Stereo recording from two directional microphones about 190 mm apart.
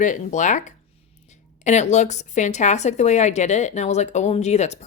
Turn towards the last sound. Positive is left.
turn(degrees=35)  # may be behind; listen again after turning